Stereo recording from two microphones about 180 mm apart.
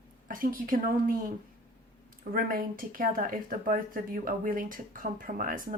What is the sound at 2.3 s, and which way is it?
Speech, 50° right (ahead or behind).